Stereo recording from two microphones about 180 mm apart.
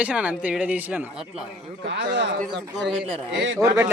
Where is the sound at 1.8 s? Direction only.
75° right (ahead or behind).